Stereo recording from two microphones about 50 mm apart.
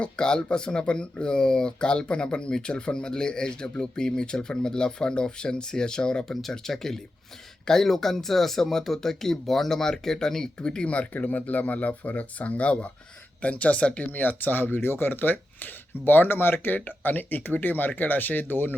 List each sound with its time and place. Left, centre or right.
0.0 s speech: centre
14.1 s speech: left